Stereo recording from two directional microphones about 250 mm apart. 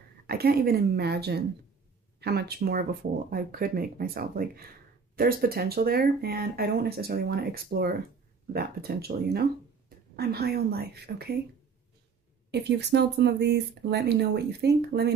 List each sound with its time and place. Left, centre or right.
0.3 s speech: right
12.4 s speech: right